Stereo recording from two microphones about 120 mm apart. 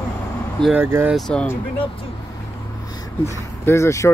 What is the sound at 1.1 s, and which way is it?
Speech, 5° left (ahead or behind).